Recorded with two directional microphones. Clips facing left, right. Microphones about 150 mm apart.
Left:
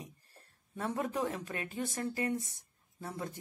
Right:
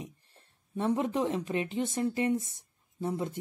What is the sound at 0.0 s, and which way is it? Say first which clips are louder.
Speech: right 6 dB; 20° right (ahead or behind).